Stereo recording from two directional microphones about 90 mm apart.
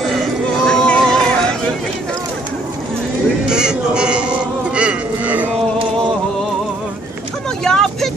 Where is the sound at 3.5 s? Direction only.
10° right (ahead or behind).